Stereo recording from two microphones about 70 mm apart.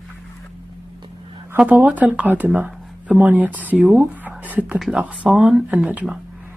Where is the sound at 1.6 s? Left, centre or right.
Right.